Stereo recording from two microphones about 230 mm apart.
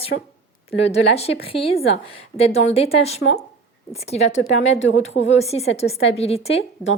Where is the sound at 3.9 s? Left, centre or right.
Left.